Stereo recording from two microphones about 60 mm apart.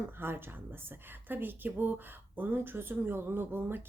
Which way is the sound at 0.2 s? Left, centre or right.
Right.